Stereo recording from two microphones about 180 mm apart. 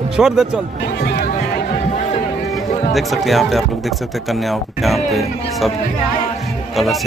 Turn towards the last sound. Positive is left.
turn(degrees=0)  # may be behind; listen again after turning